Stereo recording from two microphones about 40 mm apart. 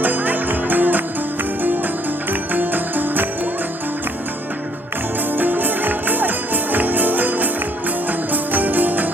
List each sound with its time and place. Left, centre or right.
0.0 s music: right
2.3 s music: right
5.3 s music: right